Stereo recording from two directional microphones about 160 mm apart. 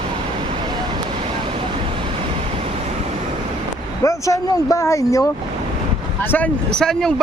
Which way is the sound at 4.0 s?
20° left (ahead or behind).